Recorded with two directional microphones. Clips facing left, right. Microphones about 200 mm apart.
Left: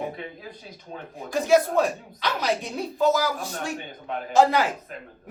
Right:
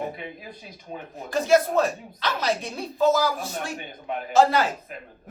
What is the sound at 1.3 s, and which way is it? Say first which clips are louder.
Speech: even; 15° left (ahead or behind).